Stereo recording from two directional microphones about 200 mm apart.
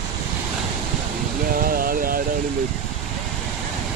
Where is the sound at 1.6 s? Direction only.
45° right (ahead or behind).